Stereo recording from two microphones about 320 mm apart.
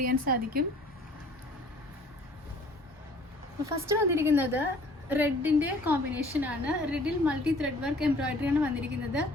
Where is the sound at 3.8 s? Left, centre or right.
Centre.